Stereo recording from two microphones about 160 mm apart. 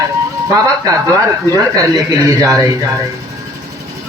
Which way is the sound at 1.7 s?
20° right (ahead or behind).